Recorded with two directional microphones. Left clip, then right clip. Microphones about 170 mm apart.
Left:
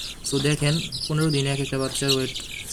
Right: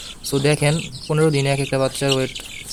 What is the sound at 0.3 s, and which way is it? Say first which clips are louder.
Speech: right 6 dB; 25° right (ahead or behind).